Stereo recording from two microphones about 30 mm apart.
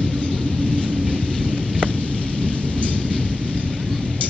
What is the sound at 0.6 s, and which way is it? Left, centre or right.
Vehicle, left.